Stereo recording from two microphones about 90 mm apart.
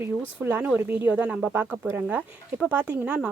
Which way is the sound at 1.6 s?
25° right (ahead or behind).